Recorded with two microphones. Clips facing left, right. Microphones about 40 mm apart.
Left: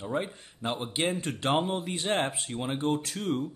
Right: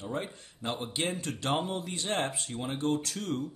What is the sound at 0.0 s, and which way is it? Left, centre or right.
Speech, centre.